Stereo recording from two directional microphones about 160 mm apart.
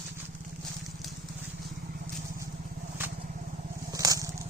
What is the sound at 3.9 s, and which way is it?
Crushing, 20° right (ahead or behind).